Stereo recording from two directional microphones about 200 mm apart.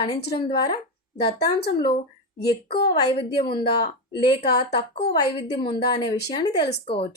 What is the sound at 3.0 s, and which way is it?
A woman's voice, 25° left (ahead or behind).